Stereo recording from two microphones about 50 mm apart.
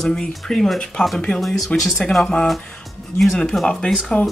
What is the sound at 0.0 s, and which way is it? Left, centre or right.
Speech, centre.